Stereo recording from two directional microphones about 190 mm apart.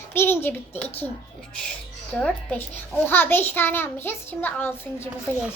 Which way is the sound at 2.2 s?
5° left (ahead or behind).